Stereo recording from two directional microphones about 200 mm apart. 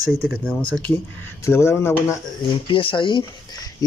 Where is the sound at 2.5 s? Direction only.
25° left (ahead or behind).